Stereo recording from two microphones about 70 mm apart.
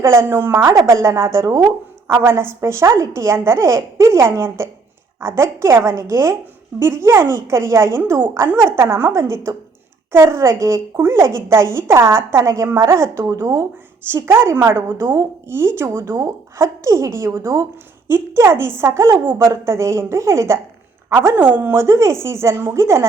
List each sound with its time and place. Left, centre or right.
0.0 s a woman's voice: right
2.2 s a woman's voice: right
10.9 s a woman's voice: right
14.0 s a woman's voice: right
21.3 s speech: right